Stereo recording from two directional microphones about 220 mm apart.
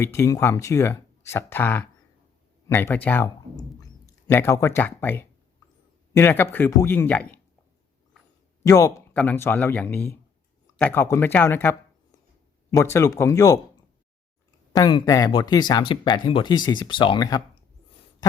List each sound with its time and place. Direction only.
0.0 s speech: 10° left (ahead or behind)
8.6 s speech: 15° left (ahead or behind)
14.7 s speech: 20° left (ahead or behind)